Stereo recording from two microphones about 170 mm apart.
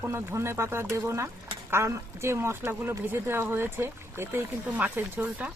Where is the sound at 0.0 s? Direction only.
15° right (ahead or behind).